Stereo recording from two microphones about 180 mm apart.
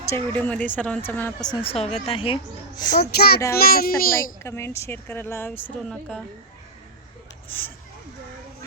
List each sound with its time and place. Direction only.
0.1 s speech: 10° left (ahead or behind)
1.5 s a woman's voice: 35° left (ahead or behind)
3.0 s speech: 60° left (ahead or behind)
4.4 s a woman's voice: 15° left (ahead or behind)
7.4 s speech: 10° left (ahead or behind)